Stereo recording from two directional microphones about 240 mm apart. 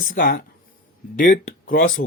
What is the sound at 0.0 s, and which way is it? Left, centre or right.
Speech, left.